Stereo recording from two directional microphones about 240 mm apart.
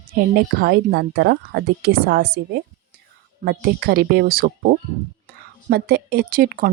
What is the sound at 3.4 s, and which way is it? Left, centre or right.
A woman's voice, right.